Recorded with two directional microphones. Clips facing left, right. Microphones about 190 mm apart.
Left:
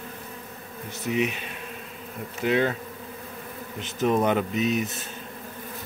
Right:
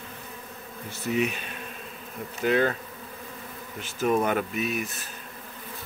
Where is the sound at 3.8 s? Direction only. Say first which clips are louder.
Left 1 dB; 20° left (ahead or behind).